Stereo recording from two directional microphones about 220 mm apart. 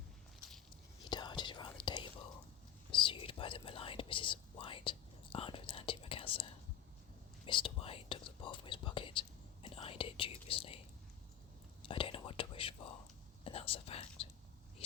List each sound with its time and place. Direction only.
1.1 s whispering: 20° left (ahead or behind)
11.9 s whispering: 25° left (ahead or behind)